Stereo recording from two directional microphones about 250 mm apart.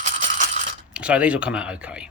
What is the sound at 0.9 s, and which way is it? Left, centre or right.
Speech, centre.